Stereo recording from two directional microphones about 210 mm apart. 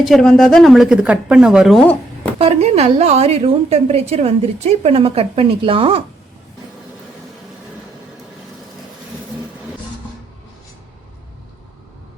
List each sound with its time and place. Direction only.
0.0 s speech: centre (ahead or behind)
2.4 s a woman's voice: 30° right (ahead or behind)